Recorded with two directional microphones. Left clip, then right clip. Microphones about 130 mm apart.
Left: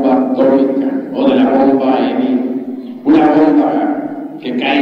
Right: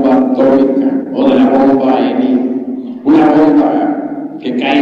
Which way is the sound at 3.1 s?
30° left (ahead or behind).